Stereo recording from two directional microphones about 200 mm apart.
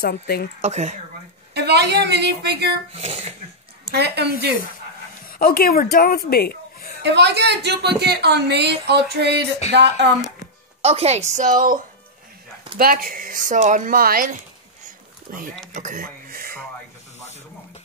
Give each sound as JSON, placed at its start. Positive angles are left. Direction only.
{"t": 0.0, "sound": "speech", "side_deg": 50}
{"t": 0.6, "sound": "a woman's voice", "side_deg": -35}
{"t": 1.5, "sound": "a woman's voice", "side_deg": -55}
{"t": 2.9, "sound": "a woman's voice", "side_deg": -30}
{"t": 3.9, "sound": "a woman's voice", "side_deg": -55}
{"t": 5.4, "sound": "speech", "side_deg": 45}
{"t": 7.0, "sound": "a woman's voice", "side_deg": -60}
{"t": 10.8, "sound": "a woman's voice", "side_deg": -30}
{"t": 15.7, "sound": "a sound", "side_deg": -40}